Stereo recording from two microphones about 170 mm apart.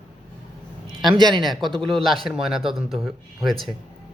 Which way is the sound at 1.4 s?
Centre (ahead or behind).